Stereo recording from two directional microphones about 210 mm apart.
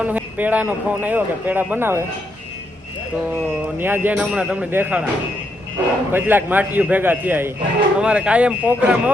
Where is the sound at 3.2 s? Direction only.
10° right (ahead or behind).